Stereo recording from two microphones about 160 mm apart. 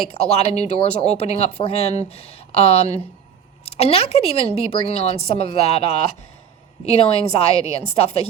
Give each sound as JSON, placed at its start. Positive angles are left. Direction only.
{"t": 0.3, "sound": "a woman's voice", "side_deg": 40}
{"t": 6.8, "sound": "a woman's voice", "side_deg": 40}